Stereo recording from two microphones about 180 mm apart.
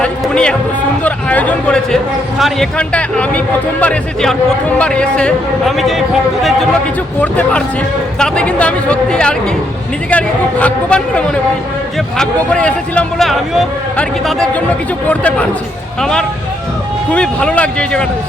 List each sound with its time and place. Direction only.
0.0 s music: 5° left (ahead or behind)
1.0 s a sound: 10° left (ahead or behind)
2.4 s a man's voice: 5° left (ahead or behind)
7.2 s a man's voice: 10° left (ahead or behind)